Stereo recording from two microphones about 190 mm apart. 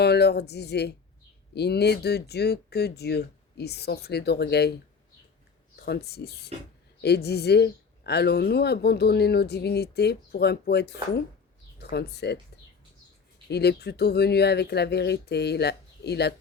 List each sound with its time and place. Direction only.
0.0 s speech: 60° left (ahead or behind)
5.8 s speech: 55° left (ahead or behind)
13.5 s speech: 60° left (ahead or behind)